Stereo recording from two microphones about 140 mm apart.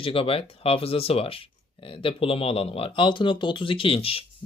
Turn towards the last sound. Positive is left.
turn(degrees=45)  # may be behind; listen again after turning